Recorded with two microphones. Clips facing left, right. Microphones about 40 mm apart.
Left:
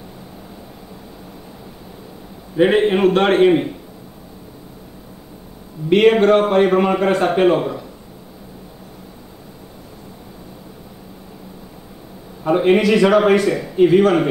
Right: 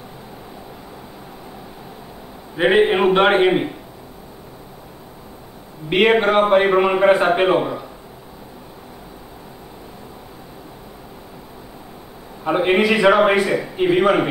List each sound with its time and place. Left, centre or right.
2.5 s a man's voice: centre
5.9 s a man's voice: centre
12.4 s a man's voice: centre